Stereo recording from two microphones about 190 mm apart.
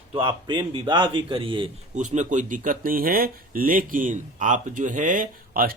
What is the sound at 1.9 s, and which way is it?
Speech, 40° right (ahead or behind).